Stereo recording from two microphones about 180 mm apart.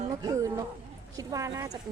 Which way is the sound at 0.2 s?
20° right (ahead or behind).